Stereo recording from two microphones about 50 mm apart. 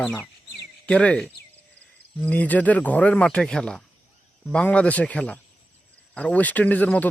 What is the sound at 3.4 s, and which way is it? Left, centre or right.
Speech, centre.